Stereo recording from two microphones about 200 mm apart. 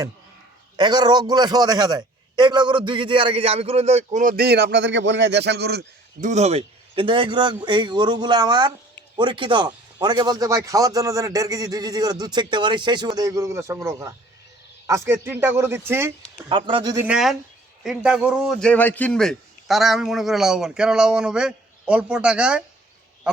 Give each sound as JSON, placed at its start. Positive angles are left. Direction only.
{"t": 0.8, "sound": "a man's voice", "side_deg": -20}
{"t": 6.1, "sound": "a man's voice", "side_deg": -35}
{"t": 16.5, "sound": "a man's voice", "side_deg": -25}
{"t": 17.1, "sound": "a man's voice", "side_deg": 0}